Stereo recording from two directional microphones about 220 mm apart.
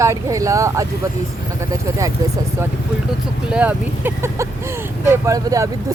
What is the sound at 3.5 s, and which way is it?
Speech, 5° right (ahead or behind).